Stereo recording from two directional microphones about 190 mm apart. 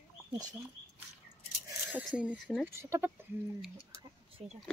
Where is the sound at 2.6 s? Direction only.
15° right (ahead or behind).